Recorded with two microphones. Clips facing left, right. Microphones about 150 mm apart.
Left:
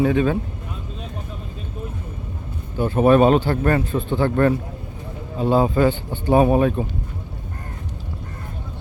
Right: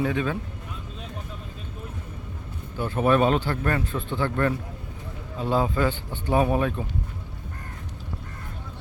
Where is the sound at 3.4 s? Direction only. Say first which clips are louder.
Left 7 dB; 35° left (ahead or behind).